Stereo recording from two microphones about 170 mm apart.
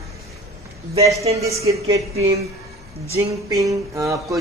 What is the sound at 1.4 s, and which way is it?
Speech, 20° right (ahead or behind).